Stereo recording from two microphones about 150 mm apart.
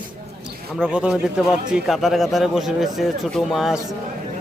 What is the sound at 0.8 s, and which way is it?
A man's voice, 5° right (ahead or behind).